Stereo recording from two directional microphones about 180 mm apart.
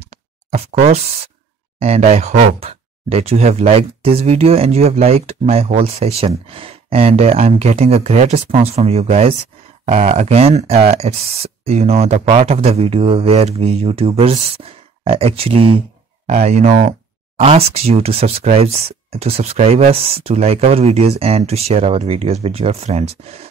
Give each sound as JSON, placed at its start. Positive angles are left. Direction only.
{"t": 0.5, "sound": "speech", "side_deg": -35}